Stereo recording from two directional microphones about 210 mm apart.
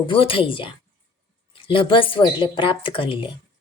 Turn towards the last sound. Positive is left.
turn(degrees=25)  # may be behind; listen again after turning